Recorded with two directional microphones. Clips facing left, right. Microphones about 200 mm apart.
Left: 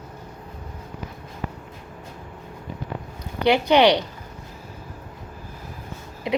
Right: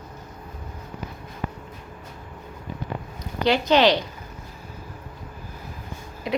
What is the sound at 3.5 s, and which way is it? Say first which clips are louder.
Speech: left 2 dB; 15° left (ahead or behind).